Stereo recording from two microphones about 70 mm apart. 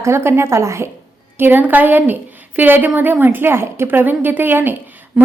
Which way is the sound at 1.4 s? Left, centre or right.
Right.